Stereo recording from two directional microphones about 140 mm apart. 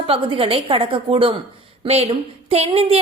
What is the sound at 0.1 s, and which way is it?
A woman's voice, 40° right (ahead or behind).